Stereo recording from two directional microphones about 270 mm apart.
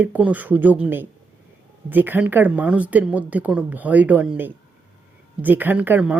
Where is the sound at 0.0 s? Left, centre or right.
Centre.